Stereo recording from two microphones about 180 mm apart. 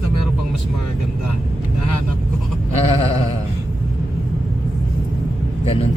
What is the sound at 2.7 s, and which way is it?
Sheep, 35° left (ahead or behind).